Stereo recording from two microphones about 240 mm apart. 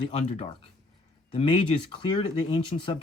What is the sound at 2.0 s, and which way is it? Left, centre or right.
Speech, left.